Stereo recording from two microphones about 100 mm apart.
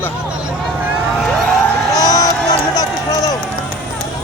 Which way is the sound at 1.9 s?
40° left (ahead or behind).